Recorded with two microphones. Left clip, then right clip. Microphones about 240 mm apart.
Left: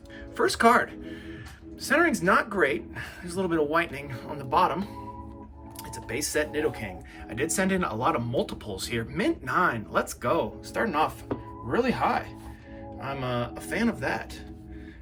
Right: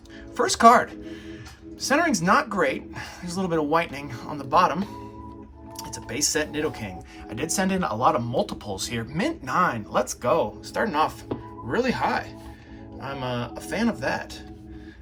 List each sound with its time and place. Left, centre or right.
0.3 s speech: centre
5.9 s speech: centre